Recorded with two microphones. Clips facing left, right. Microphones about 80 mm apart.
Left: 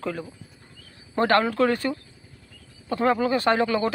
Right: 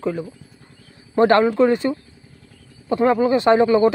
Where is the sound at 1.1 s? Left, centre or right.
Right.